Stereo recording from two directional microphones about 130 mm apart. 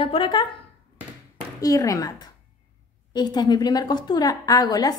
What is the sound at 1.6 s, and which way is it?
Speech, 25° left (ahead or behind).